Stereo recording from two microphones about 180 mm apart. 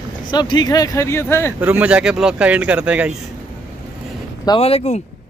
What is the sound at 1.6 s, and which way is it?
Speech, 5° right (ahead or behind).